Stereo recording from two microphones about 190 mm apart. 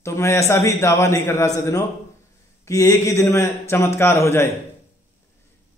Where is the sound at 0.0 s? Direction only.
15° left (ahead or behind).